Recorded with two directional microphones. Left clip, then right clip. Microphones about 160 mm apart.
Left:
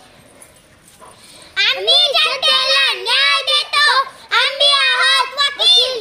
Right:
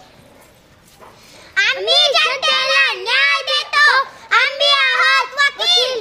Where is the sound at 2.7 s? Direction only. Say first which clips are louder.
Even; 10° left (ahead or behind).